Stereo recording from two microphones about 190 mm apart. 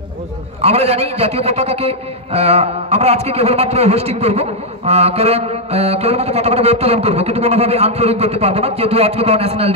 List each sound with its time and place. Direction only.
0.6 s a man's voice: 30° right (ahead or behind)